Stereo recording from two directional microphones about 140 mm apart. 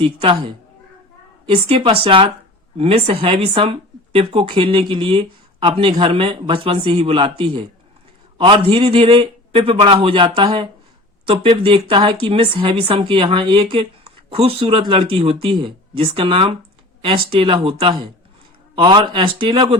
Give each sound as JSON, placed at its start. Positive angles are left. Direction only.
{"t": 0.0, "sound": "speech", "side_deg": -40}